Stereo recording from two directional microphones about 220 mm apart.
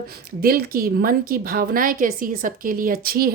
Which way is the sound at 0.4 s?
40° right (ahead or behind).